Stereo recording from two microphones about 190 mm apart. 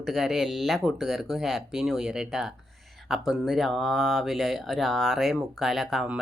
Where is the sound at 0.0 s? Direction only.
Centre (ahead or behind).